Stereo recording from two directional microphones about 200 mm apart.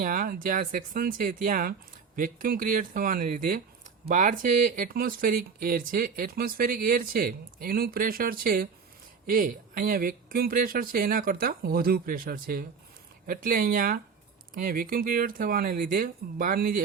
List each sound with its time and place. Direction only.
0.0 s speech: 45° right (ahead or behind)